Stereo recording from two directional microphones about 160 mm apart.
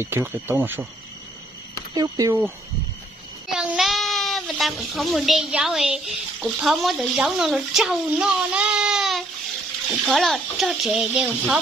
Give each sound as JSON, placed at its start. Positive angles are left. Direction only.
{"t": 0.0, "sound": "speech", "side_deg": -15}
{"t": 2.0, "sound": "speech", "side_deg": -20}
{"t": 3.5, "sound": "a sound", "side_deg": -5}
{"t": 6.4, "sound": "speech", "side_deg": 0}